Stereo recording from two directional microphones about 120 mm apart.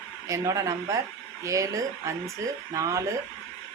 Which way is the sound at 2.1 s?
25° right (ahead or behind).